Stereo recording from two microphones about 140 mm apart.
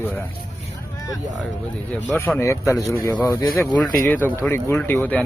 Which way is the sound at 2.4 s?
20° left (ahead or behind).